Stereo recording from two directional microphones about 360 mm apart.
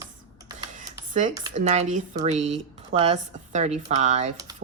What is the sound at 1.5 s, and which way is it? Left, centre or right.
Speech, centre.